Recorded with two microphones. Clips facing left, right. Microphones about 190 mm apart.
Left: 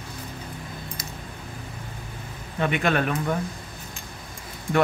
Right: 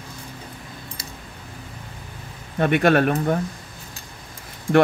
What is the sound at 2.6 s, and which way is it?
Speech, 50° right (ahead or behind).